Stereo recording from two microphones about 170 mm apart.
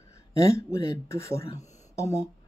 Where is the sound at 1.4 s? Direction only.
40° left (ahead or behind).